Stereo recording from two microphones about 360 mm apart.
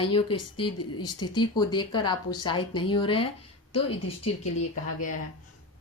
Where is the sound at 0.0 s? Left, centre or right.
Centre.